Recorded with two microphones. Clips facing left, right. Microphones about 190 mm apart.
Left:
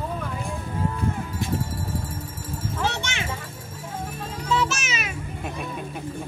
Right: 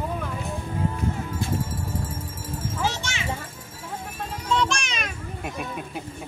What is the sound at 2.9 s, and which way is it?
Children playing, 60° left (ahead or behind).